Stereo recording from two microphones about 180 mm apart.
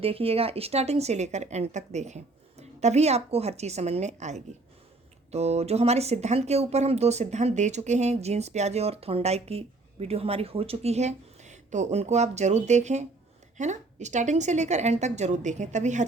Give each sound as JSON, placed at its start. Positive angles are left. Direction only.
{"t": 0.0, "sound": "speech", "side_deg": -30}